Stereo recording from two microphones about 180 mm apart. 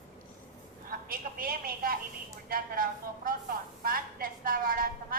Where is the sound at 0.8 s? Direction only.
55° right (ahead or behind).